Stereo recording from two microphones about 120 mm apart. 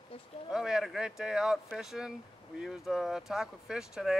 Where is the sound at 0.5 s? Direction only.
5° right (ahead or behind).